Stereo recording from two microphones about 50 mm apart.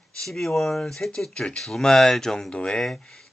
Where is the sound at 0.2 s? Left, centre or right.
Centre.